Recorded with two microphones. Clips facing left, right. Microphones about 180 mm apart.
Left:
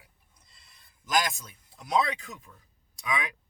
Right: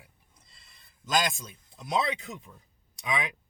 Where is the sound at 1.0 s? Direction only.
20° right (ahead or behind).